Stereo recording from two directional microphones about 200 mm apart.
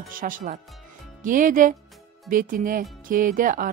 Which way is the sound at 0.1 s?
40° right (ahead or behind).